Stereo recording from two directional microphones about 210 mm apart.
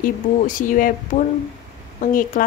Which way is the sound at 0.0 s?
40° left (ahead or behind).